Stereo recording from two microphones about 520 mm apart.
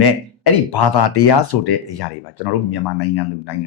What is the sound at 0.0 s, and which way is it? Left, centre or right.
Speech, left.